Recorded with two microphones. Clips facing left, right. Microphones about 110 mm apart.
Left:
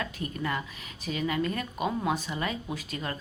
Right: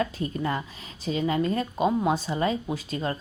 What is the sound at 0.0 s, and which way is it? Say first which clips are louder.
A woman's voice: right 6 dB; 30° right (ahead or behind).